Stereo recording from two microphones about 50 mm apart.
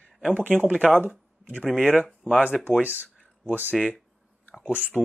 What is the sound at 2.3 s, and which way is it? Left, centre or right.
Speech, right.